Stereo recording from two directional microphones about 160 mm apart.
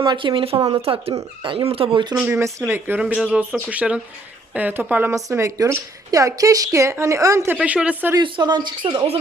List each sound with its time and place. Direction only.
0.0 s speech: 30° right (ahead or behind)
2.1 s a woman's voice: 15° right (ahead or behind)
7.5 s speech: 10° right (ahead or behind)
8.1 s a woman's voice: 30° right (ahead or behind)